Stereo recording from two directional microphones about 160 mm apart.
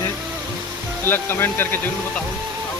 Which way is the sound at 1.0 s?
15° left (ahead or behind).